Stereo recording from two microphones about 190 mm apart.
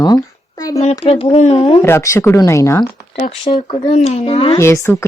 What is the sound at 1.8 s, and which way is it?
Speech, 15° left (ahead or behind).